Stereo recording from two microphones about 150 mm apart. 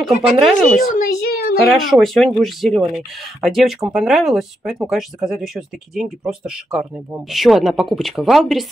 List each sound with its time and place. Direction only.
0.0 s speech: centre (ahead or behind)
0.8 s a sound: 65° left (ahead or behind); by 1.6 s 90° left
1.7 s speech: centre (ahead or behind)